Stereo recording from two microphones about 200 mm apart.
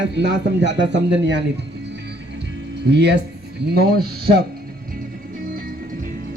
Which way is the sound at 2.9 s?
60° right (ahead or behind).